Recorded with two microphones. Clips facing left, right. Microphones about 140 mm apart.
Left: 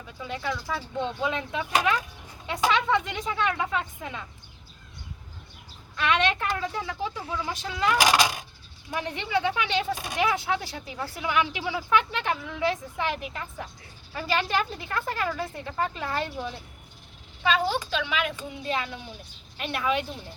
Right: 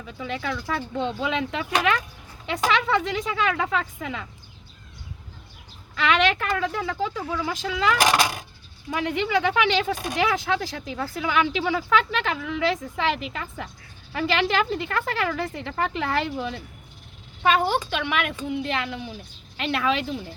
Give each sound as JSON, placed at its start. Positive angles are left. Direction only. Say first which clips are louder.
{"t": 0.3, "sound": "speech", "louder": "right 2 dB", "side_deg": -90}
{"t": 5.9, "sound": "speech", "louder": "right 3 dB", "side_deg": -90}
{"t": 17.4, "sound": "speech", "louder": "right 4 dB", "side_deg": -55}